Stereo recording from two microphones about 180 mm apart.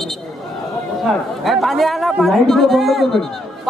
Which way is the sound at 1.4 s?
Centre (ahead or behind).